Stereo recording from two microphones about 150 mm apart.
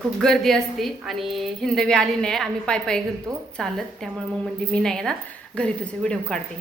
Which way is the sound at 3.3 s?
25° right (ahead or behind).